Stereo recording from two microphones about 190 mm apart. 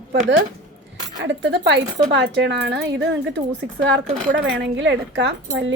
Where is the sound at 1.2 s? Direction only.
70° right (ahead or behind).